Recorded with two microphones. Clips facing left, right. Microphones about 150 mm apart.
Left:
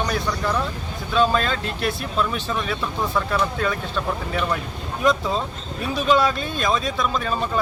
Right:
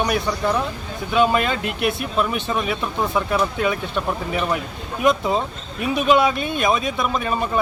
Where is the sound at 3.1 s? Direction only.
10° right (ahead or behind).